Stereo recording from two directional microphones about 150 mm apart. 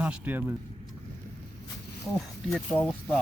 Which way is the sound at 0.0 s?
10° right (ahead or behind).